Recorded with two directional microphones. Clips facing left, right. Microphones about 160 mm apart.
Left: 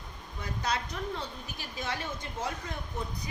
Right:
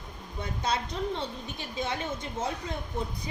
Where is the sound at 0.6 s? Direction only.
25° right (ahead or behind).